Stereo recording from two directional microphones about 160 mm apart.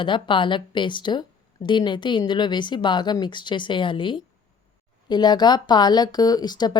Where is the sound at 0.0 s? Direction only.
30° left (ahead or behind).